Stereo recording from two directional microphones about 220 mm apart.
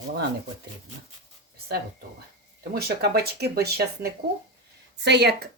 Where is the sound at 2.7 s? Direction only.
45° right (ahead or behind).